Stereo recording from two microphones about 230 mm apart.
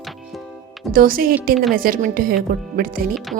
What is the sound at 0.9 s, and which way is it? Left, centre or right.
Speech, right.